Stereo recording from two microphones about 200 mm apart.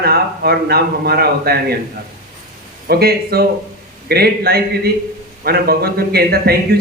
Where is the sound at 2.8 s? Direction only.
50° right (ahead or behind).